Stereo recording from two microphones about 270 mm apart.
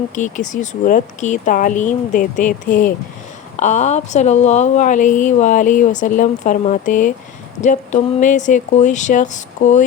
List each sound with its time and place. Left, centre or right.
0.1 s a woman's voice: left